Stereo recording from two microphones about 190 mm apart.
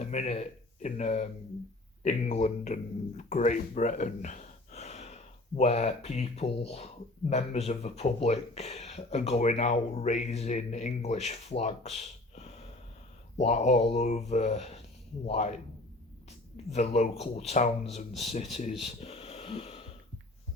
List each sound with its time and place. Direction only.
0.1 s speech: 35° left (ahead or behind)
16.7 s speech: 35° left (ahead or behind)
18.9 s wheeze: 35° left (ahead or behind)